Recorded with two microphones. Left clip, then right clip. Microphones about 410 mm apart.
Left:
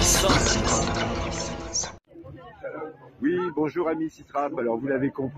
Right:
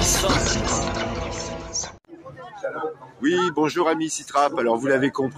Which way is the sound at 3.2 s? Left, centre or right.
Left.